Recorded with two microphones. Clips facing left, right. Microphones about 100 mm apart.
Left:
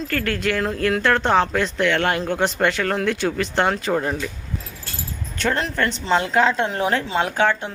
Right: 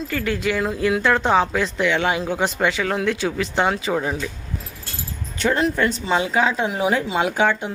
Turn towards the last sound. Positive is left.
turn(degrees=-10)  # may be behind; listen again after turning